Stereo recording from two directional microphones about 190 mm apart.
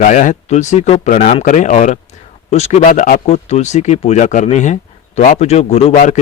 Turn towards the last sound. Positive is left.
turn(degrees=45)  # may be behind; listen again after turning